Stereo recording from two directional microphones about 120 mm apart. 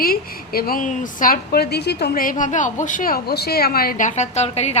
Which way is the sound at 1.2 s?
90° left.